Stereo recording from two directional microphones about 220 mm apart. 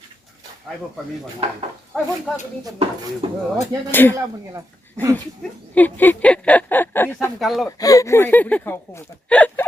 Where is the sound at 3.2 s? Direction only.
25° right (ahead or behind).